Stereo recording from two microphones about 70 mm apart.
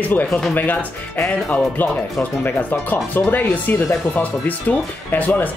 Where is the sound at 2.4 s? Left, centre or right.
Left.